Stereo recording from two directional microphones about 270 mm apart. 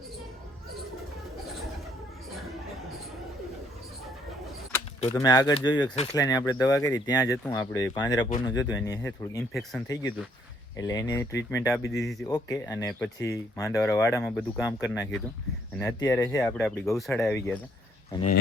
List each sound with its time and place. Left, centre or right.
5.2 s speech: centre
10.8 s speech: centre
12.3 s speech: centre
14.3 s speech: centre
14.7 s speech: centre